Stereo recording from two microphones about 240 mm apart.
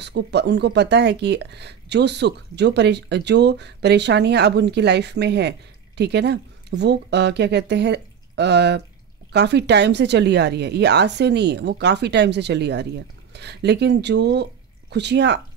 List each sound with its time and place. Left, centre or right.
0.0 s speech: right